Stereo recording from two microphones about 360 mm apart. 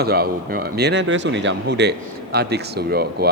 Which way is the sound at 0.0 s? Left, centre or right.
Right.